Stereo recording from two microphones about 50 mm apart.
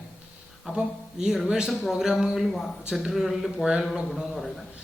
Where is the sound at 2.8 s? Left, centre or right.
Centre.